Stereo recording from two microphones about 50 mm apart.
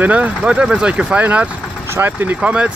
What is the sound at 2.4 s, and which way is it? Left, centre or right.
Speech, right.